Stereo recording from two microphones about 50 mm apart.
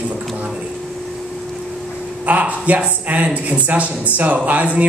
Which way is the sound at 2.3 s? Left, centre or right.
Right.